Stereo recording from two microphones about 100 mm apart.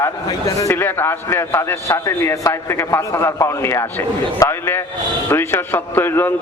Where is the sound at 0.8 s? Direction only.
20° left (ahead or behind).